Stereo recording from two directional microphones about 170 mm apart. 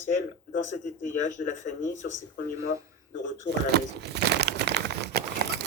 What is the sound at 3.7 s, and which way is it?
Crumpling, 75° right (ahead or behind).